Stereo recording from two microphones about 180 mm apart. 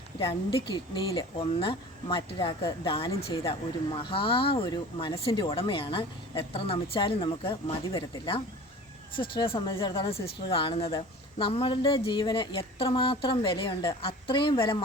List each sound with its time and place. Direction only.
0.2 s speech: 30° left (ahead or behind)